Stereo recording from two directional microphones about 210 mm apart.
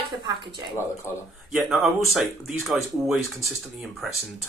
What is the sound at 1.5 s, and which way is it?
Speech, centre (ahead or behind).